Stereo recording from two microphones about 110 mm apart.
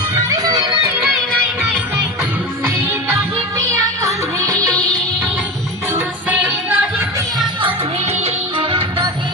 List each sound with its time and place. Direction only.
0.1 s music: 35° right (ahead or behind)
3.6 s music: 25° right (ahead or behind)
5.9 s music: 15° right (ahead or behind)
8.2 s music: 50° right (ahead or behind)